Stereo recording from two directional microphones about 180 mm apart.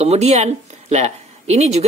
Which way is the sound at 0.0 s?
35° right (ahead or behind).